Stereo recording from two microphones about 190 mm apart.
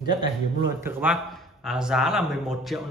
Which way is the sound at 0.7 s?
10° right (ahead or behind).